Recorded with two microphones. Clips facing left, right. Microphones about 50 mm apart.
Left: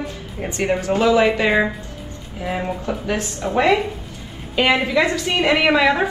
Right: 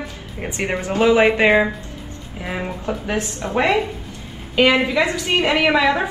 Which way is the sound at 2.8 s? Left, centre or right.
Right.